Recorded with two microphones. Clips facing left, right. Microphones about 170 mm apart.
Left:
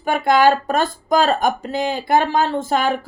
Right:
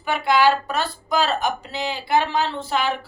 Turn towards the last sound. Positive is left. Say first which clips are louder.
# left 5 dB
turn(degrees=45)  # may be behind; listen again after turning